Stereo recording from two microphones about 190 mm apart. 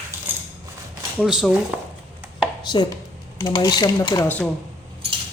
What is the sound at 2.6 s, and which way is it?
Speech, 25° left (ahead or behind).